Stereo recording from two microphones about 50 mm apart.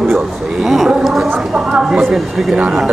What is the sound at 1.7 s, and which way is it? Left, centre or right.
Speech, centre.